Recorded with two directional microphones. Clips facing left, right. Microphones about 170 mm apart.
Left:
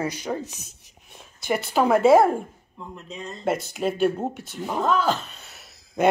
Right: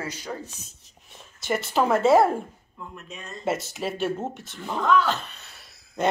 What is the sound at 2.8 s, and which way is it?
Speech, 20° left (ahead or behind).